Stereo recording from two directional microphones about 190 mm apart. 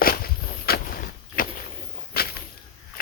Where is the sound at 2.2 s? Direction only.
55° left (ahead or behind).